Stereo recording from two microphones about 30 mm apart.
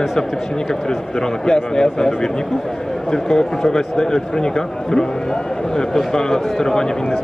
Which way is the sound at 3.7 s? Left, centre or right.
Centre.